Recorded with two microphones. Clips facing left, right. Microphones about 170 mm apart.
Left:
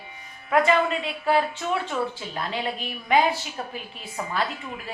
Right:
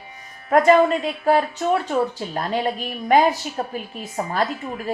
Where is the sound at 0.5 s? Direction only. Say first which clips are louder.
Right 6 dB; 40° right (ahead or behind).